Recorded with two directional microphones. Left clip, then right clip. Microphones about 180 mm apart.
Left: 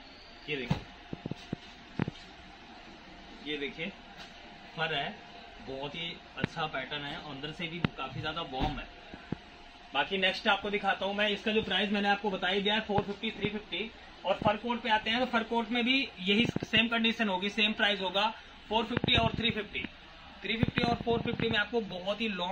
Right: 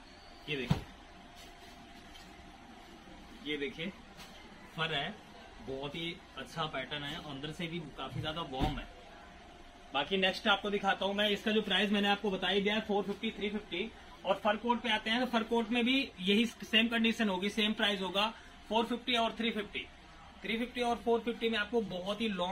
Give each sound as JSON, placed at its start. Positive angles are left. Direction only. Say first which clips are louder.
{"t": 0.5, "sound": "speech", "louder": "left 2 dB", "side_deg": 0}
{"t": 3.4, "sound": "speech", "louder": "left 1 dB", "side_deg": 0}
{"t": 10.7, "sound": "speech", "louder": "left 2 dB", "side_deg": 0}
{"t": 11.1, "sound": "a man's voice", "louder": "left 2 dB", "side_deg": -20}
{"t": 12.2, "sound": "speech", "louder": "left 2 dB", "side_deg": 0}